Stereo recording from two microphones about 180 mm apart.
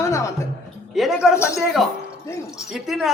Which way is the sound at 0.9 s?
Centre (ahead or behind).